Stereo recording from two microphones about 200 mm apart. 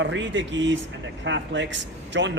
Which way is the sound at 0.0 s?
65° right (ahead or behind).